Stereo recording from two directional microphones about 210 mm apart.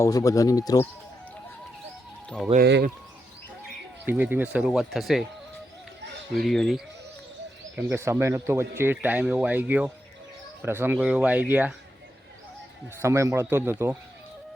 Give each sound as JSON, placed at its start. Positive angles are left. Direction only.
{"t": 0.0, "sound": "speech", "side_deg": 15}
{"t": 2.6, "sound": "speech", "side_deg": -50}
{"t": 4.0, "sound": "speech", "side_deg": -10}
{"t": 6.3, "sound": "speech", "side_deg": 0}
{"t": 7.8, "sound": "speech", "side_deg": -10}
{"t": 13.0, "sound": "speech", "side_deg": -15}